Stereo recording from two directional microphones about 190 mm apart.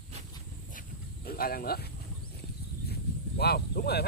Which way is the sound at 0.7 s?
50° left (ahead or behind).